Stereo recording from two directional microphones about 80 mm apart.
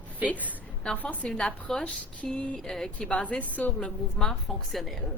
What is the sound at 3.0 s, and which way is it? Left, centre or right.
A woman's voice, centre.